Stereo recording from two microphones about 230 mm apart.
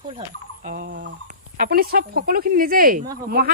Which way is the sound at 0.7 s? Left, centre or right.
Right.